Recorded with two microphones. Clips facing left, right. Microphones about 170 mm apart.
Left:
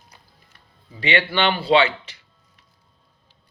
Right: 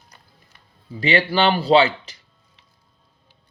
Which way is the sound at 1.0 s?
40° right (ahead or behind).